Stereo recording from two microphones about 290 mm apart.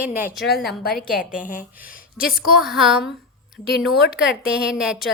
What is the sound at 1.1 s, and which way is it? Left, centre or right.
A woman's voice, left.